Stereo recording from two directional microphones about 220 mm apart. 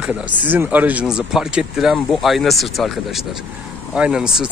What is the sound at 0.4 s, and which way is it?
Speech, 10° right (ahead or behind).